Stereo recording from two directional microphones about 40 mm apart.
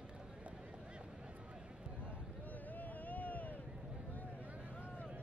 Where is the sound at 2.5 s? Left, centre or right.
Left.